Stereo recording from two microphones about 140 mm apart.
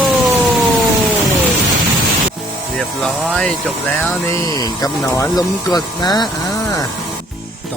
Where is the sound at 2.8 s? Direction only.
Centre (ahead or behind).